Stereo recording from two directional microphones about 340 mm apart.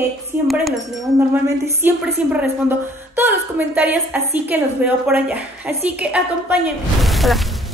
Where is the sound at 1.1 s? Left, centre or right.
Centre.